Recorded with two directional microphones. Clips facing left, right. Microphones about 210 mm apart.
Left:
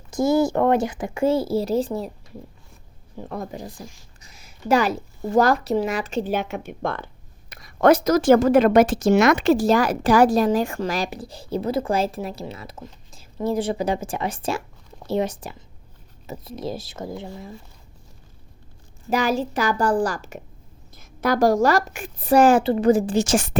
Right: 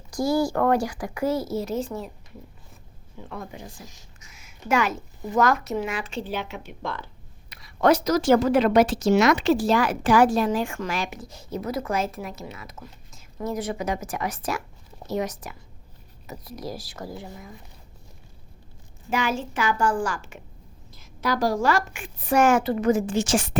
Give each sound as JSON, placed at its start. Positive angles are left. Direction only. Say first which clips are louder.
{"t": 0.1, "sound": "speech", "louder": "left 4 dB", "side_deg": 25}
{"t": 3.2, "sound": "speech", "louder": "left 6 dB", "side_deg": 40}
{"t": 19.1, "sound": "speech", "louder": "left 4 dB", "side_deg": 35}
{"t": 20.9, "sound": "speech", "louder": "left 4 dB", "side_deg": 50}